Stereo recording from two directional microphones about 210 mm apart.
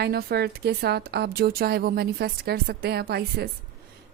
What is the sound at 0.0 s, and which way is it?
A woman's voice, 50° right (ahead or behind).